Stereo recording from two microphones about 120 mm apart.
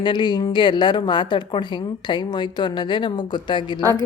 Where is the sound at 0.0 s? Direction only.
40° left (ahead or behind).